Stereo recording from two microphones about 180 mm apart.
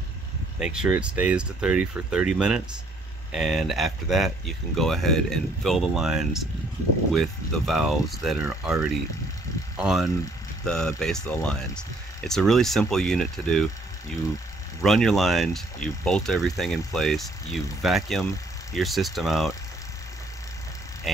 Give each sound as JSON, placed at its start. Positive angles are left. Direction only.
{"t": 0.6, "sound": "speech", "side_deg": -5}
{"t": 9.8, "sound": "speech", "side_deg": 0}
{"t": 14.8, "sound": "speech", "side_deg": 0}